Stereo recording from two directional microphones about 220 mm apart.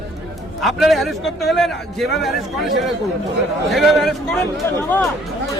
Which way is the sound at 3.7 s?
Centre (ahead or behind).